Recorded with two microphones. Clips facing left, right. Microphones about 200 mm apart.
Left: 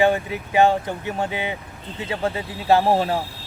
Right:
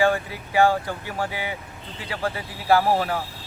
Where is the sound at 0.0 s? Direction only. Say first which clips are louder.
Left 3 dB; 20° left (ahead or behind).